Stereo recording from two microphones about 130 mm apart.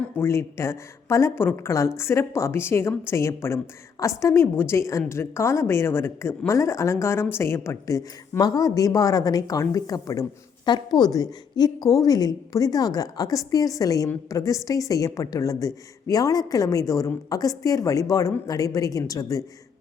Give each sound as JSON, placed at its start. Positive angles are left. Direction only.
{"t": 0.2, "sound": "a woman's voice", "side_deg": 20}